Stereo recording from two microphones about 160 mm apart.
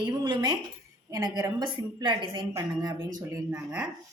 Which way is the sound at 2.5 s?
20° right (ahead or behind).